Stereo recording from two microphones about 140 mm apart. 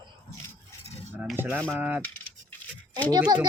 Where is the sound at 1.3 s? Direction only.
15° right (ahead or behind).